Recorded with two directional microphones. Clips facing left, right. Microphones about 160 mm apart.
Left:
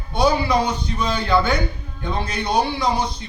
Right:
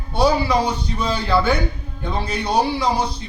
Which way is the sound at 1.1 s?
5° right (ahead or behind).